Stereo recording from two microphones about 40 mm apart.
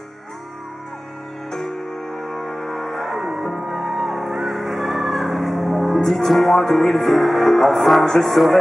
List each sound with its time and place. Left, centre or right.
1.5 s music: centre